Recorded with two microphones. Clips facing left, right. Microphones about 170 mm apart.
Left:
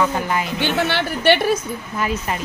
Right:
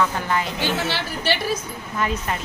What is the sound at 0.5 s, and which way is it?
A woman's voice, 60° left (ahead or behind).